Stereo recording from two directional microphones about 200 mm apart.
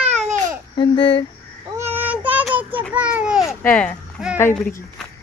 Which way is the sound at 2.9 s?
5° right (ahead or behind).